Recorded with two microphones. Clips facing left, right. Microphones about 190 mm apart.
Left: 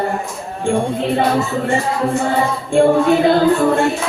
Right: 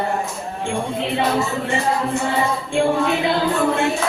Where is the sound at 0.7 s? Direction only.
45° left (ahead or behind).